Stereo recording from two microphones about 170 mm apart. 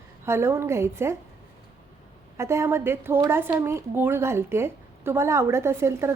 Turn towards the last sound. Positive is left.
turn(degrees=-15)  # may be behind; listen again after turning